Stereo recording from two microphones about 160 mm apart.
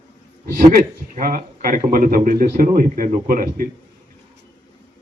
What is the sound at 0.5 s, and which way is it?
Speech, 60° right (ahead or behind).